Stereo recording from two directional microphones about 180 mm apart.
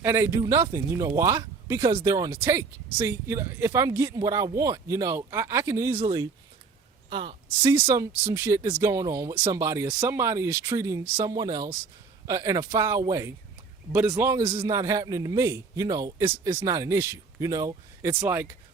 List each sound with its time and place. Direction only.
0.0 s speech: 15° right (ahead or behind)
6.0 s a woman's voice: 25° right (ahead or behind)
7.7 s speech: 15° right (ahead or behind)